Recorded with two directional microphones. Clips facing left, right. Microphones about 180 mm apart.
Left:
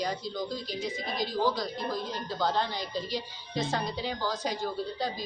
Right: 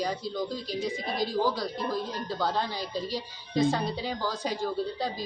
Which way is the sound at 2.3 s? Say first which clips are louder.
Left 1 dB; 10° right (ahead or behind).